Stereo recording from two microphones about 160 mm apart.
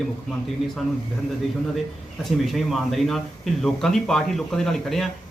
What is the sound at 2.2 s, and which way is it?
Speech, centre (ahead or behind).